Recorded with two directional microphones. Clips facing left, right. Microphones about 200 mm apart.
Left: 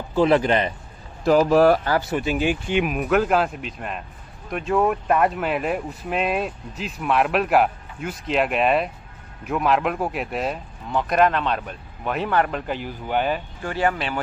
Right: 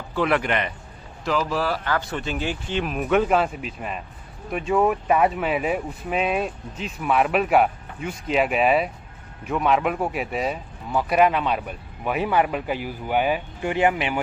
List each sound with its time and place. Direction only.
0.1 s a man's voice: 30° left (ahead or behind)
1.2 s speech: 50° left (ahead or behind)
2.0 s speech: 10° left (ahead or behind)
3.0 s speech: centre (ahead or behind); by 14.2 s 15° right (ahead or behind)